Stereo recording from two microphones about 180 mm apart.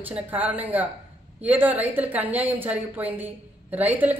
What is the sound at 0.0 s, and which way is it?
A woman's voice, 10° right (ahead or behind).